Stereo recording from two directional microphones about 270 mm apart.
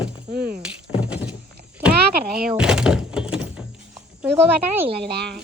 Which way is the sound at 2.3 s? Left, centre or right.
Centre.